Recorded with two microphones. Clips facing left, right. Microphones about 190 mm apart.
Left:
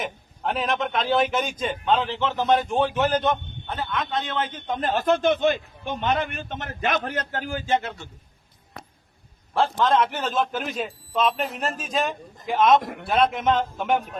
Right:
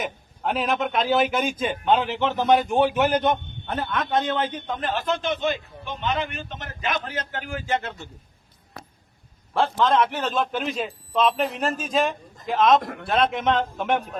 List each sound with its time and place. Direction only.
0.0 s a man's voice: centre (ahead or behind)
3.7 s a man's voice: 50° right (ahead or behind)
4.8 s a man's voice: 45° left (ahead or behind)
9.6 s a man's voice: centre (ahead or behind)